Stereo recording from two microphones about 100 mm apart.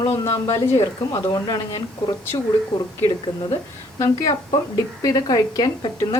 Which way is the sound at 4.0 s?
30° left (ahead or behind).